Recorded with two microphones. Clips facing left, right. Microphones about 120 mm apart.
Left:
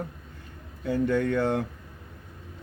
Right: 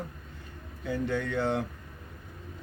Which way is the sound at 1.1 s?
50° left (ahead or behind).